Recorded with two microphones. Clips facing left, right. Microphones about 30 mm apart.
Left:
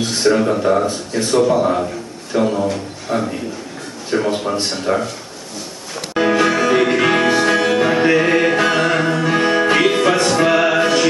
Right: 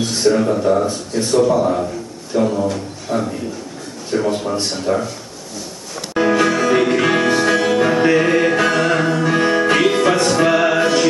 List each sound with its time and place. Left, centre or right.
0.0 s speech: left
6.1 s music: centre